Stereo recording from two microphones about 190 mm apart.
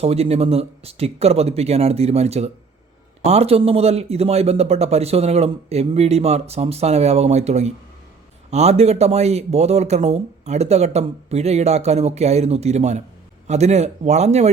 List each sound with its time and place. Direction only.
0.0 s speech: 30° right (ahead or behind)